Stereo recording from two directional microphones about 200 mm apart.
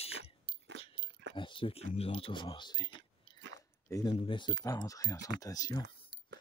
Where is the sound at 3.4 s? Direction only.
60° right (ahead or behind).